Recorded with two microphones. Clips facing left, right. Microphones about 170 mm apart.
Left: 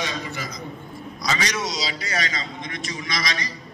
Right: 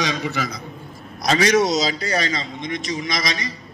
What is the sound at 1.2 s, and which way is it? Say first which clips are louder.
Speech: right 10 dB; 55° right (ahead or behind).